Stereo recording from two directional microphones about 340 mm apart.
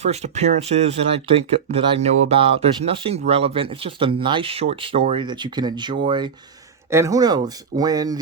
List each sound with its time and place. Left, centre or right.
0.0 s speech: centre